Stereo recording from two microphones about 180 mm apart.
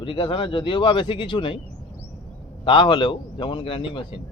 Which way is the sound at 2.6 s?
30° left (ahead or behind).